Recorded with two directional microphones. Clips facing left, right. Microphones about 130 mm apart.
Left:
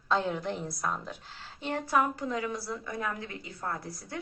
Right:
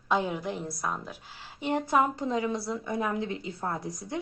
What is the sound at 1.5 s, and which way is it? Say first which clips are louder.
A woman's voice: right 3 dB; 15° right (ahead or behind).